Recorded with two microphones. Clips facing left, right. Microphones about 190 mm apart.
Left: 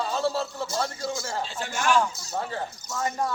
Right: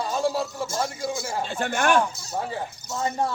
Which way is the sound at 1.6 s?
60° right (ahead or behind).